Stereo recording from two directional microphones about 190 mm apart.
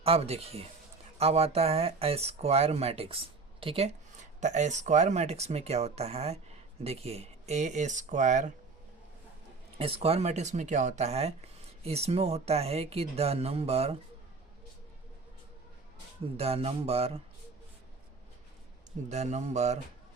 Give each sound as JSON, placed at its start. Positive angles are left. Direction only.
{"t": 0.0, "sound": "speech", "side_deg": -30}
{"t": 9.7, "sound": "speech", "side_deg": -30}
{"t": 16.4, "sound": "speech", "side_deg": -30}
{"t": 19.0, "sound": "speech", "side_deg": -35}